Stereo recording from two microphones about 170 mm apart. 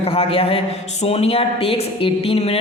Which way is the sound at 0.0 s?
35° left (ahead or behind).